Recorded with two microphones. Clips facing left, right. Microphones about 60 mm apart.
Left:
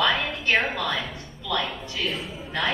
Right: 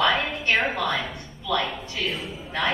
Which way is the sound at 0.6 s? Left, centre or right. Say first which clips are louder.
Right 2 dB; right.